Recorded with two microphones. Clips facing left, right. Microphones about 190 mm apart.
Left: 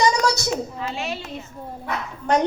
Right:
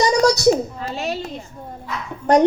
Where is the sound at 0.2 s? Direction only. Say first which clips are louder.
Right 8 dB; 40° right (ahead or behind).